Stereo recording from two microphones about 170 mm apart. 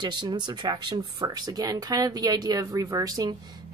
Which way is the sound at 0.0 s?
25° right (ahead or behind).